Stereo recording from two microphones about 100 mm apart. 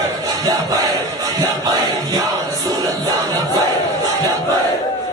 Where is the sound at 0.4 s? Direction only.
35° right (ahead or behind).